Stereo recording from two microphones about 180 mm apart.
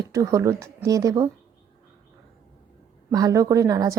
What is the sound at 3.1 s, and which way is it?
Speech, 20° right (ahead or behind).